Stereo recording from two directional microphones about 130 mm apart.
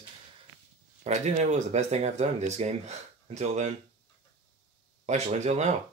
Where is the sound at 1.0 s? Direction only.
60° right (ahead or behind).